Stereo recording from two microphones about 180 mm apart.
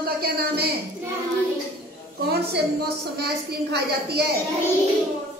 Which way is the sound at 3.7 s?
65° right (ahead or behind).